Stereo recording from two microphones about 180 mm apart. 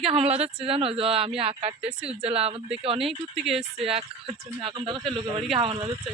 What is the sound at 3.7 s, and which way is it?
Speech, 35° right (ahead or behind).